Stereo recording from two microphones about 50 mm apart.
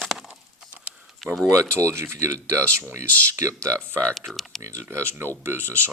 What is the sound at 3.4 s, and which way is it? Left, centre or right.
Speech, right.